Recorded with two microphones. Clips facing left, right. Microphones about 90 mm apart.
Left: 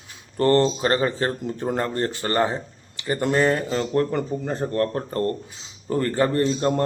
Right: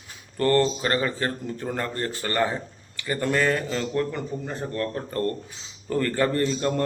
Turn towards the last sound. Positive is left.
turn(degrees=30)  # may be behind; listen again after turning